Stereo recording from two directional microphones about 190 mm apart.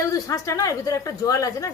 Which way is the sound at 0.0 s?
15° left (ahead or behind).